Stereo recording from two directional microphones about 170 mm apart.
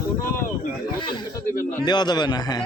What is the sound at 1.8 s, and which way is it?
Speech, 25° left (ahead or behind).